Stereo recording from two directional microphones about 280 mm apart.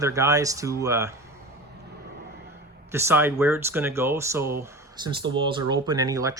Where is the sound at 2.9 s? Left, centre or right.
Centre.